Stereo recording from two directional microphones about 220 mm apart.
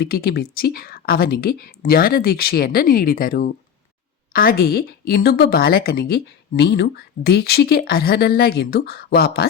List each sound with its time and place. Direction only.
0.0 s a woman's voice: 45° left (ahead or behind)